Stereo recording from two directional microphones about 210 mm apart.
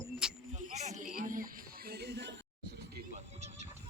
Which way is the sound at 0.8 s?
35° right (ahead or behind).